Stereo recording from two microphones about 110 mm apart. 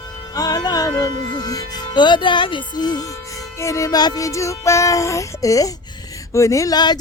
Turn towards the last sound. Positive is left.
turn(degrees=40)  # may be behind; listen again after turning